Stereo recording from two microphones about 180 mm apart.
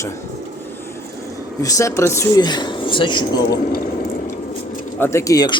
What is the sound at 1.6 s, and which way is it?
Speech, 15° left (ahead or behind).